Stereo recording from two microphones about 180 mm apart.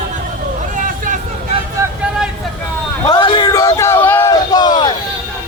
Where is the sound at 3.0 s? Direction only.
25° left (ahead or behind).